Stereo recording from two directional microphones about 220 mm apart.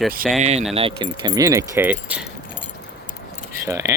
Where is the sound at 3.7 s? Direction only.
10° right (ahead or behind).